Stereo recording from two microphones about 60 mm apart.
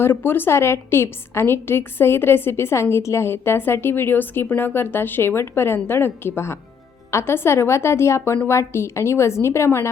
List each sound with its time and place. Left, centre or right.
0.0 s a woman's voice: left